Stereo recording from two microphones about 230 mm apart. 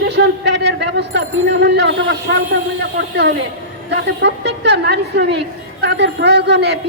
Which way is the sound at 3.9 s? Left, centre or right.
Right.